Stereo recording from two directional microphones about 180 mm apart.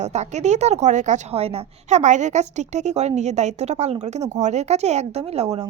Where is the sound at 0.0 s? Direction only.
40° right (ahead or behind).